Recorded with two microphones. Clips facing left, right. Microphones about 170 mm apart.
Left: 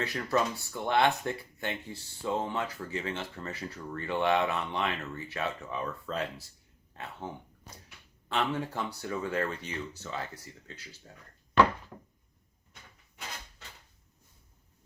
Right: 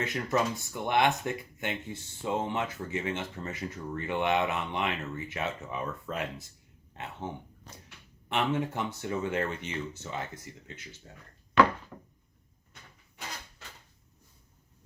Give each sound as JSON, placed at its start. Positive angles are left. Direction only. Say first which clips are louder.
{"t": 0.0, "sound": "speech", "louder": "even", "side_deg": -20}
{"t": 7.7, "sound": "a sound", "louder": "left 1 dB", "side_deg": 10}
{"t": 8.3, "sound": "speech", "louder": "right 2 dB", "side_deg": -20}